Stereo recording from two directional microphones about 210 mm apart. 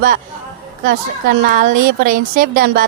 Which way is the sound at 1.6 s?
40° right (ahead or behind).